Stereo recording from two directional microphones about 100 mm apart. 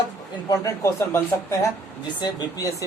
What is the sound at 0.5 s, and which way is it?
Speech, 35° left (ahead or behind).